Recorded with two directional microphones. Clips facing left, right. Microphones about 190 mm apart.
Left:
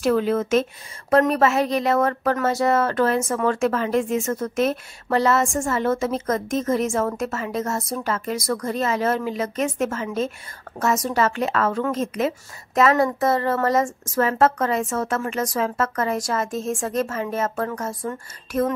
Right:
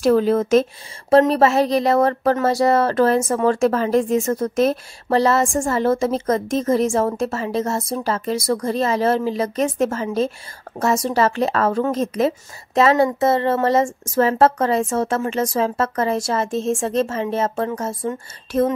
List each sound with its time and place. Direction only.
0.0 s a woman's voice: 35° right (ahead or behind)